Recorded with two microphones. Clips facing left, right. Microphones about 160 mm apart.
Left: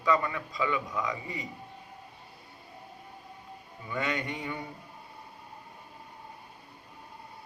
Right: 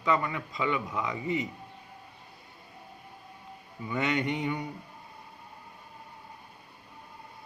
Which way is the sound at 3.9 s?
20° right (ahead or behind).